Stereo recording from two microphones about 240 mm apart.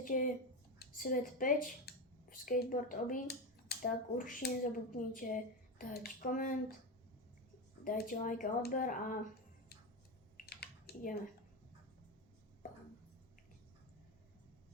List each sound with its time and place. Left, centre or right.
0.0 s speech: left
7.9 s speech: left
10.3 s typing: left